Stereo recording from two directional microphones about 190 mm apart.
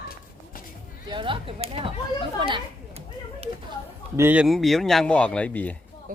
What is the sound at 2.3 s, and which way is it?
Children playing, 25° right (ahead or behind).